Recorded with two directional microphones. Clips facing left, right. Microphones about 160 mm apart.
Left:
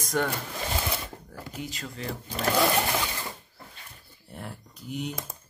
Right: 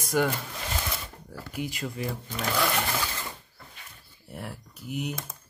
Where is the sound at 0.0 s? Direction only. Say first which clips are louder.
Right 2 dB; 10° right (ahead or behind).